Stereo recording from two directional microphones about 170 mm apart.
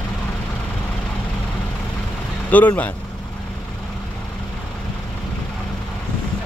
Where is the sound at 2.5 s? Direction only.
10° left (ahead or behind).